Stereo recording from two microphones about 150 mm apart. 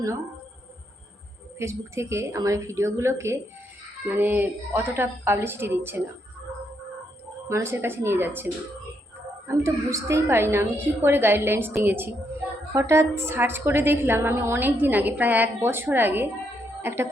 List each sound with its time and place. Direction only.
1.5 s a woman's voice: 20° right (ahead or behind)
7.4 s a woman's voice: 20° right (ahead or behind)
9.6 s a woman's voice: 20° right (ahead or behind)